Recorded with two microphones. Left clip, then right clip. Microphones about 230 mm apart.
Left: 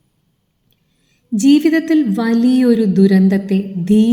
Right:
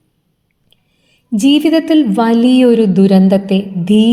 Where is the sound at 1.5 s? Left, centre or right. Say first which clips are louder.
Right 2 dB; right.